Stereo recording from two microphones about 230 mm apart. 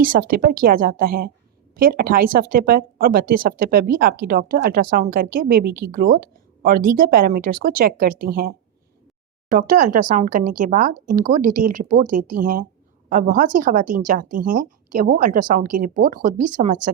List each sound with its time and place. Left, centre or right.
0.0 s speech: right